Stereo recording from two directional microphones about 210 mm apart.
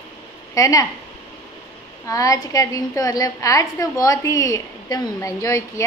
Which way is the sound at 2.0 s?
15° left (ahead or behind).